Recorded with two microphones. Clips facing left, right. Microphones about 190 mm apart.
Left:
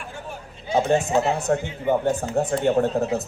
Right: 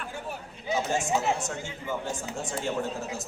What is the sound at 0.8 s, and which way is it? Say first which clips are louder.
A man's voice: left 9 dB; 60° left (ahead or behind).